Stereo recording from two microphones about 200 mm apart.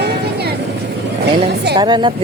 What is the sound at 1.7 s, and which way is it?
Speech, 20° right (ahead or behind).